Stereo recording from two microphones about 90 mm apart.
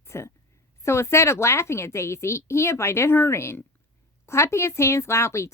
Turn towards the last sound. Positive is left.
turn(degrees=30)  # may be behind; listen again after turning